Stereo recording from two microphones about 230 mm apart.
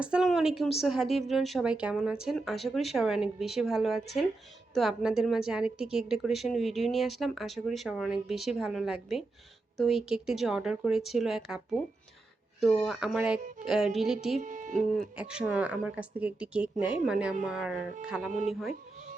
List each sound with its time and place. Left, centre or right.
0.0 s a woman's voice: centre
12.8 s a woman's voice: centre
14.4 s speech: right
15.1 s a woman's voice: centre